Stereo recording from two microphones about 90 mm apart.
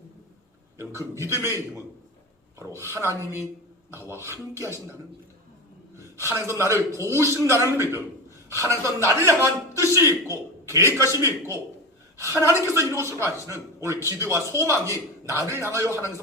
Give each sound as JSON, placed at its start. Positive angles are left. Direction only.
{"t": 1.2, "sound": "a man's voice", "side_deg": -35}
{"t": 2.6, "sound": "a man's voice", "side_deg": -30}
{"t": 6.1, "sound": "a man's voice", "side_deg": -30}